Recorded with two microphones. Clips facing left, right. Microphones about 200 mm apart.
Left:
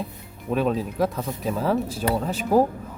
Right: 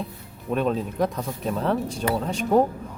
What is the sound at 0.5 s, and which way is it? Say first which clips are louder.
Speech: left 1 dB; centre (ahead or behind).